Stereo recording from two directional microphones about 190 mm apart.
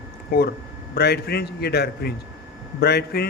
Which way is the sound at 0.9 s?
55° left (ahead or behind).